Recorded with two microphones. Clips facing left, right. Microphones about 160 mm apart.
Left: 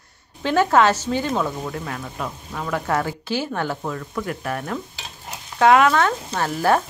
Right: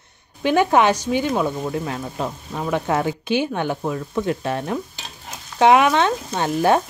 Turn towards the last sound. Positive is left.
turn(degrees=-20)  # may be behind; listen again after turning